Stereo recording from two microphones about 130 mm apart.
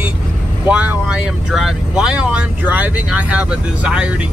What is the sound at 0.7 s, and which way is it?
Speech, 10° right (ahead or behind).